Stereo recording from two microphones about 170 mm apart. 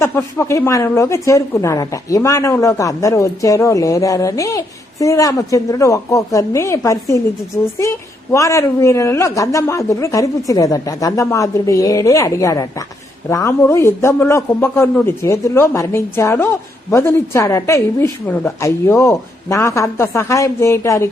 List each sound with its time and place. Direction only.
0.0 s speech: 15° left (ahead or behind)